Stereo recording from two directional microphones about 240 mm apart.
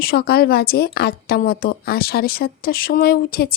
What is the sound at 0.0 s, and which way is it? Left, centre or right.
A woman's voice, left.